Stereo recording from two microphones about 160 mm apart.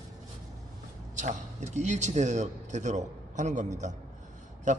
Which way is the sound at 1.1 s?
50° right (ahead or behind).